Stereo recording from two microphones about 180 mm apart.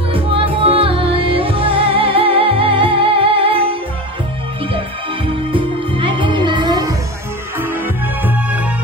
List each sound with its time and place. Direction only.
0.1 s music: 30° right (ahead or behind)
5.2 s music: 30° right (ahead or behind)
7.5 s music: 10° right (ahead or behind)